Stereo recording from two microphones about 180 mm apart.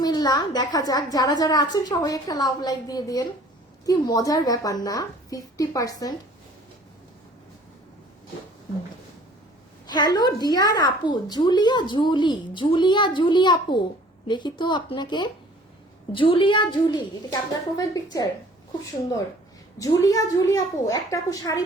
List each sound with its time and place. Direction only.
0.0 s a woman's voice: 20° left (ahead or behind)
9.8 s a woman's voice: 25° left (ahead or behind)
19.8 s a woman's voice: 20° left (ahead or behind)